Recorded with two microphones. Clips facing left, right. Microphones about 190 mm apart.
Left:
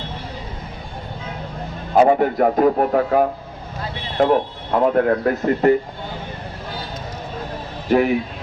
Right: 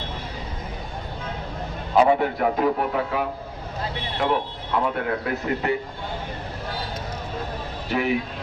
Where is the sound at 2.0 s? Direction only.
45° left (ahead or behind).